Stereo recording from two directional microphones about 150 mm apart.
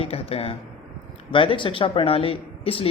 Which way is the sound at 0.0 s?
40° left (ahead or behind).